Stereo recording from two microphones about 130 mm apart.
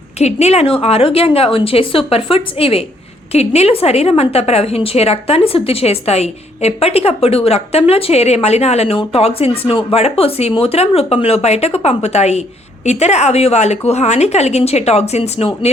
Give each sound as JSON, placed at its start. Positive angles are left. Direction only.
{"t": 0.2, "sound": "a woman's voice", "side_deg": 55}